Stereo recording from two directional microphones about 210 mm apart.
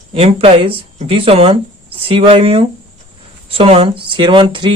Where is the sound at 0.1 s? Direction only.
25° right (ahead or behind).